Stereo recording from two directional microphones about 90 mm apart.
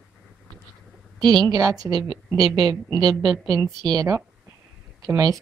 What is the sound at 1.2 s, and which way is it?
A woman's voice, 50° right (ahead or behind).